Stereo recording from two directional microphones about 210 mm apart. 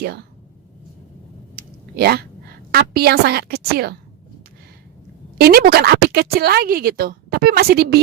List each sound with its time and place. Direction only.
1.5 s a sound: 50° right (ahead or behind)
2.7 s speech: 50° right (ahead or behind)
5.4 s speech: 45° right (ahead or behind)